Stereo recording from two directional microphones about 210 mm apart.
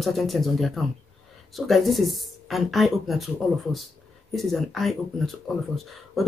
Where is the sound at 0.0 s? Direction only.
Centre (ahead or behind).